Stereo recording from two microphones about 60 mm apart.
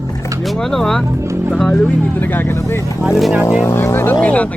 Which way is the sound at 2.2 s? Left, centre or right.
Left.